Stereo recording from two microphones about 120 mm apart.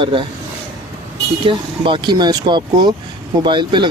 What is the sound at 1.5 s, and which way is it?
Speech, 45° right (ahead or behind).